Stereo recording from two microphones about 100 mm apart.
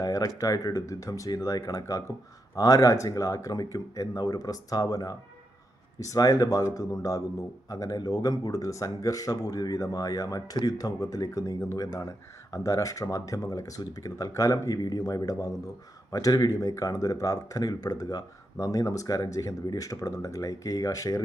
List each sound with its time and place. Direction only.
0.0 s speech: 35° left (ahead or behind)